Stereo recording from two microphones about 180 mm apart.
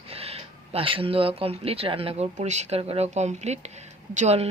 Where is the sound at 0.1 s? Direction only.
35° right (ahead or behind).